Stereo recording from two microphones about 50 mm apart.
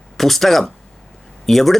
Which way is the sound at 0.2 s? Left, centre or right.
Centre.